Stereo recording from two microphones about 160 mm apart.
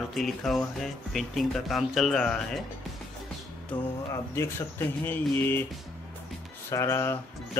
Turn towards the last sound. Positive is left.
turn(degrees=15)  # may be behind; listen again after turning